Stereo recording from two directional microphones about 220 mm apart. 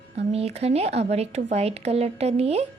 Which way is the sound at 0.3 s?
30° right (ahead or behind).